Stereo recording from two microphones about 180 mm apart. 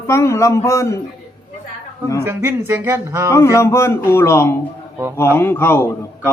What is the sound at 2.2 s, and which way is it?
Speech, 10° right (ahead or behind).